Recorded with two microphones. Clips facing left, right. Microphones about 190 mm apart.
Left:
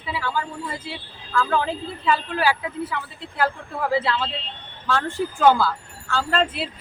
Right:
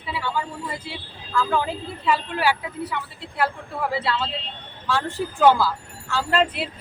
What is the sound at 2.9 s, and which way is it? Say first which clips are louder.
Speech: even; centre (ahead or behind).